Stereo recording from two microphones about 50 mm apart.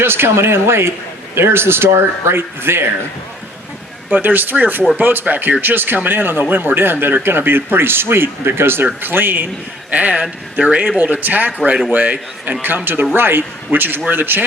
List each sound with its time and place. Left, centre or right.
0.0 s speech: right
4.1 s a man's voice: right
9.9 s a man's voice: right